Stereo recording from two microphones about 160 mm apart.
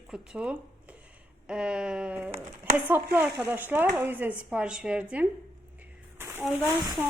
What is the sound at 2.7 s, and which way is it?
Speech, 10° right (ahead or behind).